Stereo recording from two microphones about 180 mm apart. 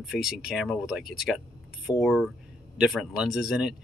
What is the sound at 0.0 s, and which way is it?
Speech, centre (ahead or behind).